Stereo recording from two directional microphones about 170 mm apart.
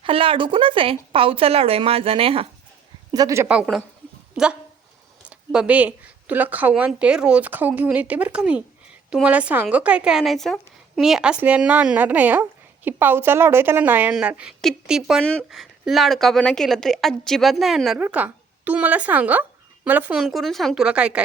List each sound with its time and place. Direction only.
0.0 s speech: 30° right (ahead or behind)
3.1 s a woman's voice: 20° right (ahead or behind)
3.5 s a woman's voice: 5° right (ahead or behind)